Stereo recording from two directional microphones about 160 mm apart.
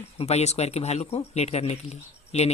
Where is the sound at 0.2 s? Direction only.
40° left (ahead or behind).